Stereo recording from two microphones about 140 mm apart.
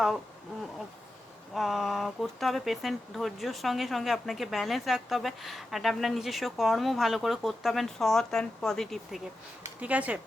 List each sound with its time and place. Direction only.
1.5 s speech: centre (ahead or behind)
9.8 s speech: 10° right (ahead or behind)